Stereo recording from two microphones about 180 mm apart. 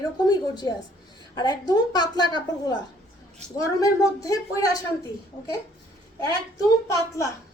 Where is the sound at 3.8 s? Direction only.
20° left (ahead or behind).